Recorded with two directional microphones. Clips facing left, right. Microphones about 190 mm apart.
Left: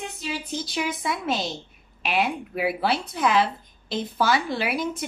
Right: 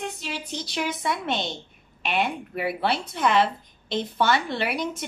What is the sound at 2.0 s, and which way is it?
A woman's voice, centre (ahead or behind).